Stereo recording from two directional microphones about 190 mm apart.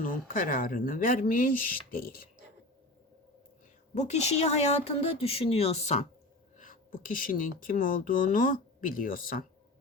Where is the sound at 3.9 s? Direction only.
35° left (ahead or behind).